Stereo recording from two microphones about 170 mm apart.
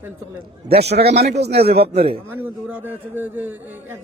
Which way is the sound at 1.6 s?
35° right (ahead or behind).